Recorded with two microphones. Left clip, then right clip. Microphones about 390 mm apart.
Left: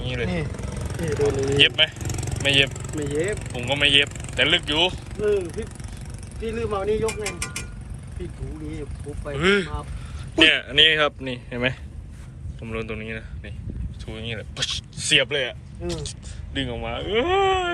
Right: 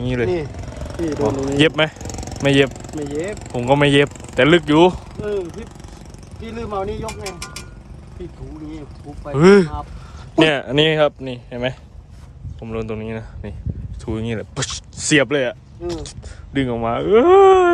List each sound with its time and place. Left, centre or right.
0.1 s speech: centre
3.9 s speech: centre
6.6 s speech: centre
9.2 s speech: centre